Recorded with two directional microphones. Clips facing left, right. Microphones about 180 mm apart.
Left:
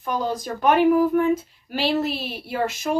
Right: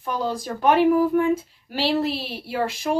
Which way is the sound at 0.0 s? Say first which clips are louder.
Left 1 dB; 30° right (ahead or behind).